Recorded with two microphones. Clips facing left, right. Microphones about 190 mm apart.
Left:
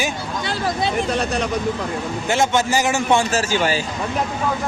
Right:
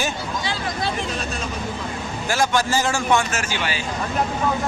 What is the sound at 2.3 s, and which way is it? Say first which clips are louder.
A man's voice: left 2 dB; 20° left (ahead or behind).